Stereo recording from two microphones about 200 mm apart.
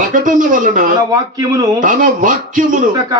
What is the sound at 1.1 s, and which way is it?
Speech, 20° right (ahead or behind).